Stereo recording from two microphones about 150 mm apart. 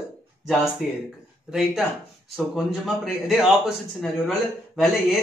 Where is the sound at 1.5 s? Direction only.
5° right (ahead or behind).